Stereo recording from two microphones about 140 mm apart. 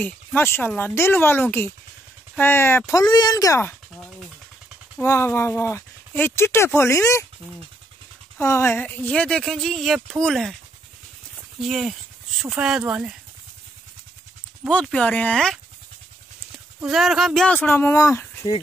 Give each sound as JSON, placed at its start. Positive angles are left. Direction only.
{"t": 0.0, "sound": "speech", "side_deg": 15}
{"t": 5.0, "sound": "speech", "side_deg": 20}
{"t": 8.4, "sound": "speech", "side_deg": 15}
{"t": 11.6, "sound": "speech", "side_deg": 0}
{"t": 14.7, "sound": "speech", "side_deg": 10}